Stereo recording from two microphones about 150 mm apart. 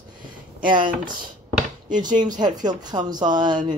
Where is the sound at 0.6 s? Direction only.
30° right (ahead or behind).